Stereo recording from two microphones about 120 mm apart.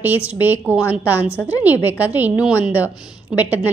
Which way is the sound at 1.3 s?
20° left (ahead or behind).